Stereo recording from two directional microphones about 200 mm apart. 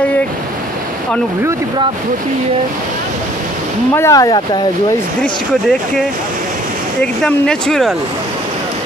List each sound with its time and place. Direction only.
3.9 s speech: 15° left (ahead or behind)
5.2 s speech: 5° left (ahead or behind)